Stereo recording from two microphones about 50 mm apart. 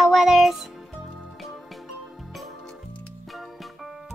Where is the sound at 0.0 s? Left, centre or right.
Centre.